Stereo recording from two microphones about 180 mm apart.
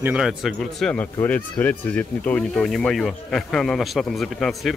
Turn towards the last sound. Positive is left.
turn(degrees=0)  # may be behind; listen again after turning